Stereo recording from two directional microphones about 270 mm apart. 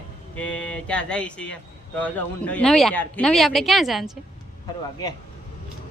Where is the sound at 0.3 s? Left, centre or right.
Centre.